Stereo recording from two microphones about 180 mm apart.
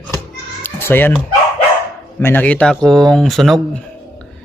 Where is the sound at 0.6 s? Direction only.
10° left (ahead or behind).